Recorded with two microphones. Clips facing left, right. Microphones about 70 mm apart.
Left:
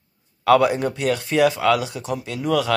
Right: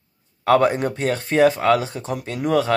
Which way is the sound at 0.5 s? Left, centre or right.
Right.